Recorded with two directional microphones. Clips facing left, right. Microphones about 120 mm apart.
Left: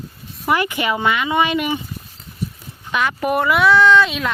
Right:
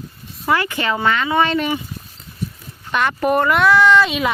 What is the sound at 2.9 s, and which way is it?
Speech, 5° left (ahead or behind).